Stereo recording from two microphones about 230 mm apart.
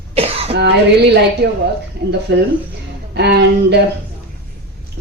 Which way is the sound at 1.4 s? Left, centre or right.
Right.